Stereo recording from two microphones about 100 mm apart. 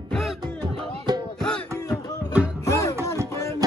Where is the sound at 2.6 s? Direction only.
30° left (ahead or behind).